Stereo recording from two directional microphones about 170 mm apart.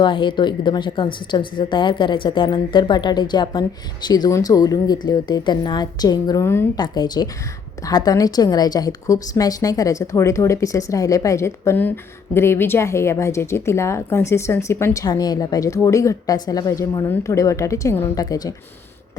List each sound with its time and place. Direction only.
0.0 s a woman's voice: 30° left (ahead or behind)